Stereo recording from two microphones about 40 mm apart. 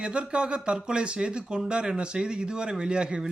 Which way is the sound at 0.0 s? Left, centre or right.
Right.